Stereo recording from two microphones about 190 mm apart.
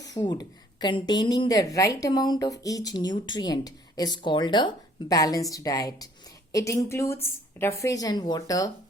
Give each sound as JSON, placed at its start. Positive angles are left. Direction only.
{"t": 0.1, "sound": "a woman's voice", "side_deg": 20}